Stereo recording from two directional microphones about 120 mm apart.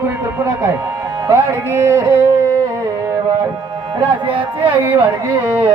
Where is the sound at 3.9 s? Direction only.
45° right (ahead or behind).